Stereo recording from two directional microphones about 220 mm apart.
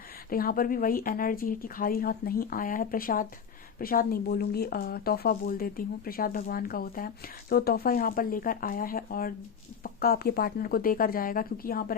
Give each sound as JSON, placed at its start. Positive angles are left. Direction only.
{"t": 0.3, "sound": "speech", "side_deg": 40}